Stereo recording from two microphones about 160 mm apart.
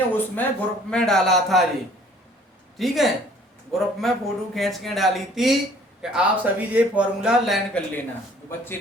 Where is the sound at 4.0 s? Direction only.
Centre (ahead or behind).